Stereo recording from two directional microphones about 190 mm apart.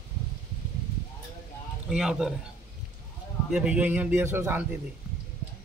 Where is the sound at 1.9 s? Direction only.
5° right (ahead or behind).